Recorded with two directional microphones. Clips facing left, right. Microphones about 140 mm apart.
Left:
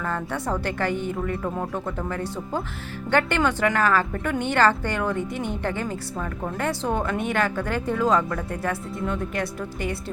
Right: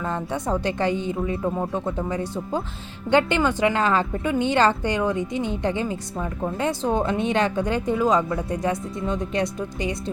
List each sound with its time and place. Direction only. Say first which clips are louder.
0.0 s a woman's voice: right 1 dB; 15° right (ahead or behind)